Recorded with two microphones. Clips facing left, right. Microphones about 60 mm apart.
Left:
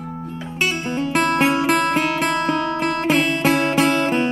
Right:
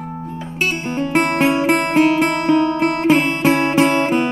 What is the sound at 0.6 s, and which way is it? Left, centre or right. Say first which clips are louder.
Music: right 1 dB; right.